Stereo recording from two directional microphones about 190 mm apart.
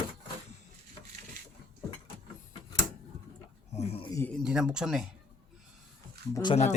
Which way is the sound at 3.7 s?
30° left (ahead or behind).